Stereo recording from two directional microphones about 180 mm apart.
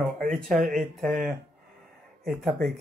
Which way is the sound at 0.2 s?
5° left (ahead or behind).